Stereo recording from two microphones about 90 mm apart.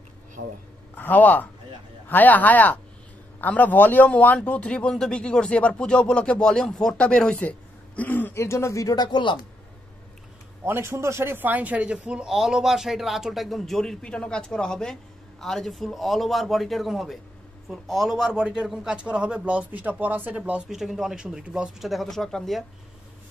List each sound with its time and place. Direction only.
0.9 s a man's voice: 20° left (ahead or behind)
8.4 s speech: 35° left (ahead or behind); by 9.4 s 60° left (ahead or behind)
10.6 s a man's voice: 30° right (ahead or behind)
20.6 s a man's voice: 5° right (ahead or behind)